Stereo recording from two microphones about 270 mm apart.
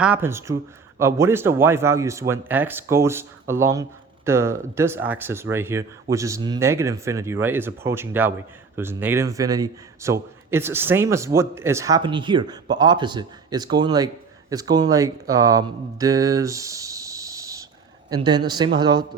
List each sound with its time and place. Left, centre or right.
0.0 s speech: centre